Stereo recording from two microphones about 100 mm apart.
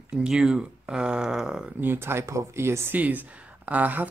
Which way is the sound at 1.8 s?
25° right (ahead or behind).